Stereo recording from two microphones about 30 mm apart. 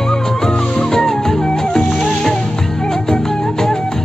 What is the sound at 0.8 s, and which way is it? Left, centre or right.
Music, centre.